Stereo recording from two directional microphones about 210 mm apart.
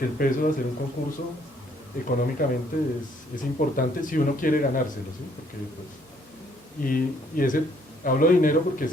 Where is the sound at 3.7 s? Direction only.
40° left (ahead or behind).